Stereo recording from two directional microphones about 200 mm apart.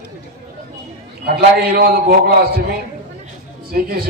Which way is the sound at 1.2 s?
50° right (ahead or behind).